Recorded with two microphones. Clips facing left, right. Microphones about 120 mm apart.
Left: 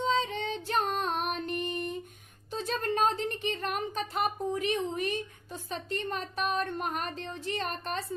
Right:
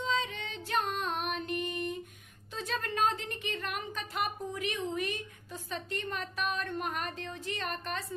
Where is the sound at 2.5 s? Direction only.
35° left (ahead or behind).